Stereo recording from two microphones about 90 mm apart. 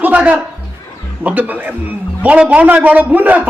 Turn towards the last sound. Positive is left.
turn(degrees=-20)  # may be behind; listen again after turning